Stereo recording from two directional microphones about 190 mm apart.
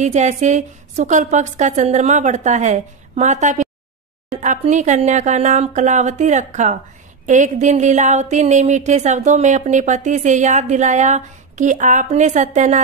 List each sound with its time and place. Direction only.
0.0 s speech: 40° right (ahead or behind)